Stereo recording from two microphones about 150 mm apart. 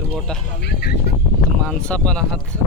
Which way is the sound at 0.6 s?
90° left.